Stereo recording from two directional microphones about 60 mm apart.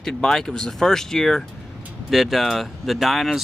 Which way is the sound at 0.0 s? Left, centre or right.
Centre.